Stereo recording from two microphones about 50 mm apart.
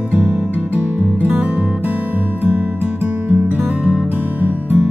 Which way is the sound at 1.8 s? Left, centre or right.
Right.